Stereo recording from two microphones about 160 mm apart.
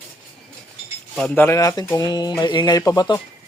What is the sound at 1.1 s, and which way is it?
Speech, 10° left (ahead or behind).